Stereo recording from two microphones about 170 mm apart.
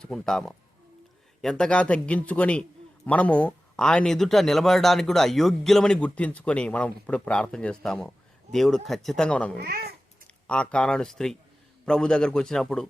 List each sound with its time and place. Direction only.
0.0 s speech: centre (ahead or behind)
9.6 s speech: 65° right (ahead or behind)
10.4 s speech: 5° left (ahead or behind)